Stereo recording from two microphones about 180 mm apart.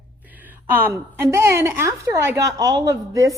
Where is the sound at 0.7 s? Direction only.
10° right (ahead or behind).